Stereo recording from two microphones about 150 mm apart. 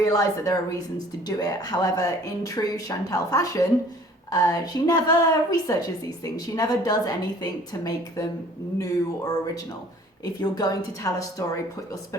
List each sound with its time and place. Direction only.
0.0 s speech: 25° left (ahead or behind)
10.4 s speech: 25° left (ahead or behind)